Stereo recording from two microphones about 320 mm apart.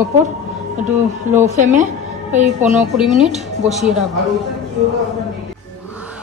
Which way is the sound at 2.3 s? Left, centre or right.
Centre.